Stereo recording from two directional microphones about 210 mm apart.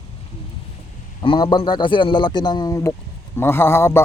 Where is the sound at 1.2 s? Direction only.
20° left (ahead or behind).